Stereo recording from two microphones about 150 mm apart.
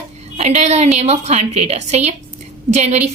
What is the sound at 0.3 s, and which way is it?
A woman's voice, 50° right (ahead or behind).